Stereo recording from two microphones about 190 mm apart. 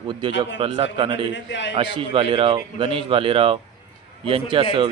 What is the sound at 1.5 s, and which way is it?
Speech, 70° left (ahead or behind).